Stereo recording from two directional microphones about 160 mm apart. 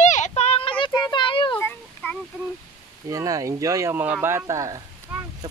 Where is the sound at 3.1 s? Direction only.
20° right (ahead or behind).